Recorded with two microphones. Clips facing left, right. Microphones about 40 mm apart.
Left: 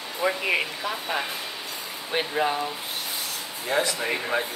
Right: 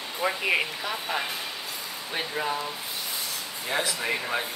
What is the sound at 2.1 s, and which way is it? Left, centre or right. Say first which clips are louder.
Speech: left 5 dB; left.